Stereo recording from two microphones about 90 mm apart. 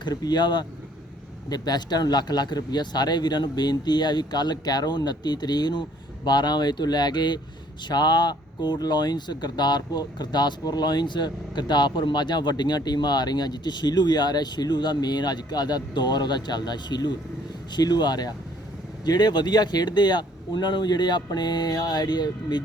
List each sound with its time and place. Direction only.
0.0 s speech: 50° left (ahead or behind)